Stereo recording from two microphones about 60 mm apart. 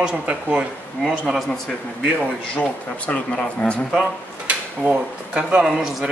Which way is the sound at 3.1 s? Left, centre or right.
Centre.